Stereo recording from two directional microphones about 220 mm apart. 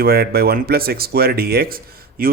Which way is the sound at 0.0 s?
45° right (ahead or behind).